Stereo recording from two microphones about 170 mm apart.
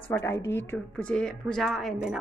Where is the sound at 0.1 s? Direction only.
15° left (ahead or behind).